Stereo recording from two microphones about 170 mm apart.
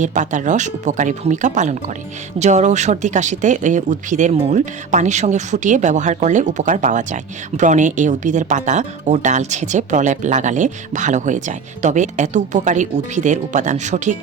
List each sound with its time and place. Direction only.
0.0 s speech: 45° right (ahead or behind)